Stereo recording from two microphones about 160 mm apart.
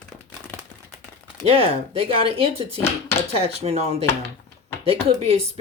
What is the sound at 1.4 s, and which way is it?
Speech, 35° right (ahead or behind).